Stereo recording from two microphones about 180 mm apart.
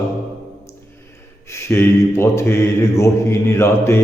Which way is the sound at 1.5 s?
15° left (ahead or behind).